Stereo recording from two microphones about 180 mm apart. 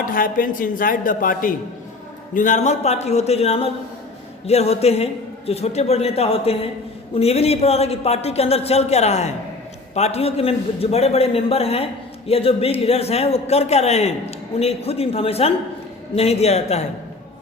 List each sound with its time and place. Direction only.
0.0 s dishes: 50° left (ahead or behind)
2.3 s speech: 45° left (ahead or behind)